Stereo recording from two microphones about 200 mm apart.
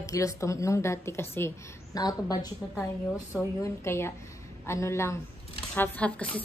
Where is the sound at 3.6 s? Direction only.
15° left (ahead or behind).